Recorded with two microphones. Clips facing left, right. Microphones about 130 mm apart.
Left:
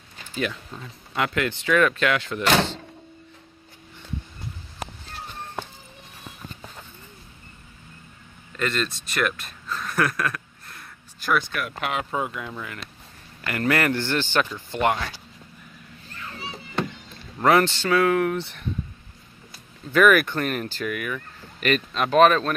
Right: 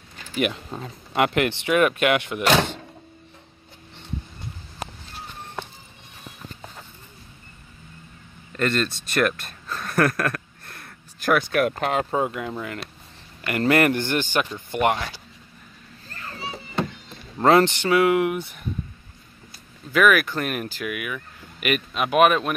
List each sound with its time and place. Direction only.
0.7 s speech: 40° right (ahead or behind)
1.1 s speech: 20° right (ahead or behind)
8.5 s speech: 50° right (ahead or behind)
11.8 s speech: 40° right (ahead or behind); by 15.0 s 20° right (ahead or behind)
16.2 s children playing: 40° right (ahead or behind)
17.4 s speech: 25° right (ahead or behind); by 18.7 s 10° right (ahead or behind)
19.9 s speech: 5° right (ahead or behind)